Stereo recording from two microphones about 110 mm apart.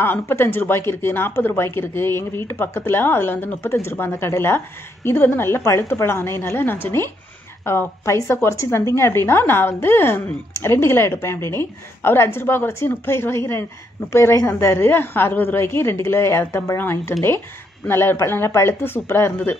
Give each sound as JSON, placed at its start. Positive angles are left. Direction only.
{"t": 0.0, "sound": "speech", "side_deg": 20}